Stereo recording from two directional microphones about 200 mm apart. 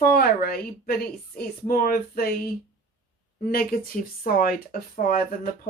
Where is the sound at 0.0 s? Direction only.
50° left (ahead or behind).